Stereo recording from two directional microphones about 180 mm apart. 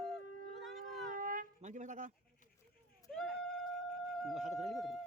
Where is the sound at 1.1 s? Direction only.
50° right (ahead or behind).